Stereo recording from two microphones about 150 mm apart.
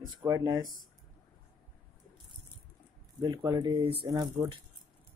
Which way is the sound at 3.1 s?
25° right (ahead or behind).